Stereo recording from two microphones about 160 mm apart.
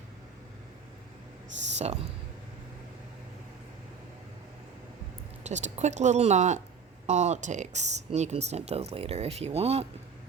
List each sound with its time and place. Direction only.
1.8 s speech: 40° right (ahead or behind)
5.4 s speech: 45° right (ahead or behind)